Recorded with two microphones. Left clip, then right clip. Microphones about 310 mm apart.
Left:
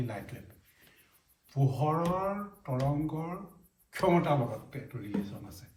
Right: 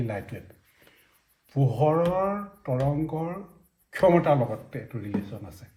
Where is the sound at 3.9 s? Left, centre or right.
Right.